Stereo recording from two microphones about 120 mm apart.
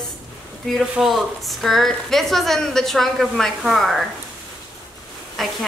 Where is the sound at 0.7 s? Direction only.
Centre (ahead or behind).